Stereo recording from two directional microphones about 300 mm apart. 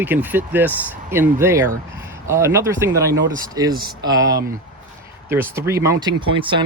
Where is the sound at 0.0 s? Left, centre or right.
Centre.